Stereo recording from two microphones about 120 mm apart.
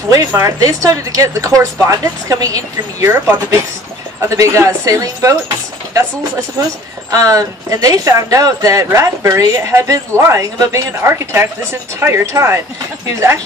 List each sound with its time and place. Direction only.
0.1 s speech: 25° right (ahead or behind)
7.1 s speech: 30° right (ahead or behind)